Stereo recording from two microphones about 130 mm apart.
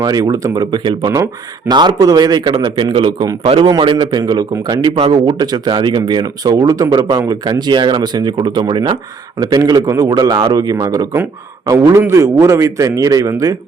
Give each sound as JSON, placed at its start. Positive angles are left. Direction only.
{"t": 0.0, "sound": "a man's voice", "side_deg": -30}